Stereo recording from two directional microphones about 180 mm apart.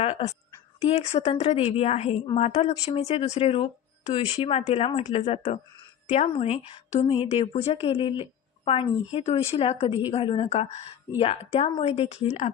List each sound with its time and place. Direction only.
0.0 s a woman's voice: 35° left (ahead or behind)